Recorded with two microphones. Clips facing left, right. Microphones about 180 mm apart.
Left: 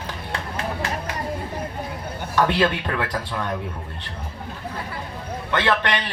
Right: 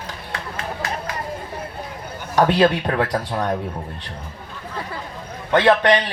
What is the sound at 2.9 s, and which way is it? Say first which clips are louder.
Speech: right 5 dB; 35° right (ahead or behind).